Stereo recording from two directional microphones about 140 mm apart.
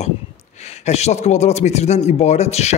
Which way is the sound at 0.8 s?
50° left (ahead or behind).